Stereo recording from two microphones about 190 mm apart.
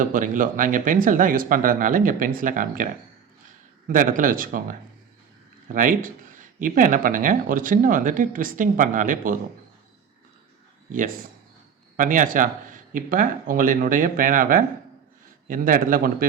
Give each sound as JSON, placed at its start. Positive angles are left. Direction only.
{"t": 0.0, "sound": "speech", "side_deg": -45}
{"t": 11.9, "sound": "speech", "side_deg": -45}